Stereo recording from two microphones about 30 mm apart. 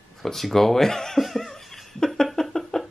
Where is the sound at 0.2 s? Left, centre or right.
Centre.